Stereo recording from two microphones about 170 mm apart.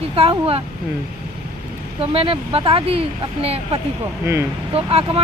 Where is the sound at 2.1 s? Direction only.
30° right (ahead or behind).